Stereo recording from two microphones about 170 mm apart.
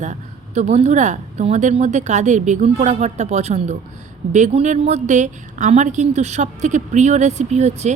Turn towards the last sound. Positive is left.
turn(degrees=-40)  # may be behind; listen again after turning